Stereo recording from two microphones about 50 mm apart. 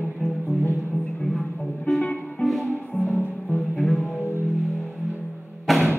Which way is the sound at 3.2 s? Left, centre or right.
Left.